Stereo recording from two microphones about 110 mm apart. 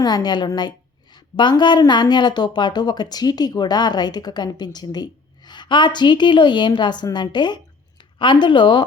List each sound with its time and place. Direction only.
0.0 s speech: 40° left (ahead or behind)